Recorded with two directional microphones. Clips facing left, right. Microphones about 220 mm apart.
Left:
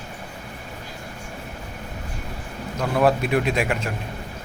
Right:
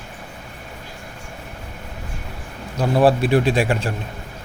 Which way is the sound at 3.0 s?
30° right (ahead or behind).